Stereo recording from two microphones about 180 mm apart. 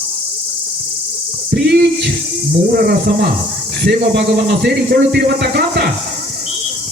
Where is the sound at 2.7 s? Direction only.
60° right (ahead or behind).